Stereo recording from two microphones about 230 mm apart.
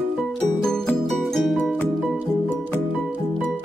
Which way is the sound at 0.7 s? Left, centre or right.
Centre.